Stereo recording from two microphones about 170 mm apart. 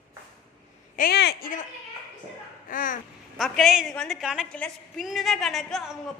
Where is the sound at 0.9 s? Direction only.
65° left (ahead or behind).